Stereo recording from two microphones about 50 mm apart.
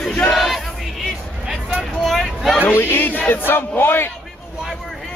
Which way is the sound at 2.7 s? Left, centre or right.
Left.